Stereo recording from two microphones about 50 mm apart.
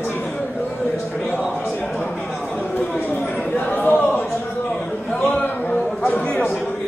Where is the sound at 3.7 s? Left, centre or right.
Left.